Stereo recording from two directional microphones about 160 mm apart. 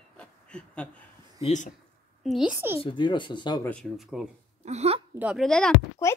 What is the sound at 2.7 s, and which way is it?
Speech, 30° left (ahead or behind).